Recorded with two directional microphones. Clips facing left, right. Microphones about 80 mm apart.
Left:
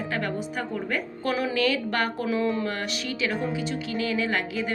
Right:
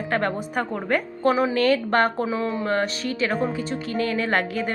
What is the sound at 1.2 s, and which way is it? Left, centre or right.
A woman's voice, right.